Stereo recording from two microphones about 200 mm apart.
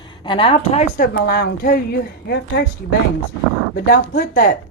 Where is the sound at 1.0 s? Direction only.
50° left (ahead or behind).